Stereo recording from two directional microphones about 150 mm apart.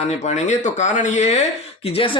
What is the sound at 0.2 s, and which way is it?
Speech, 50° left (ahead or behind).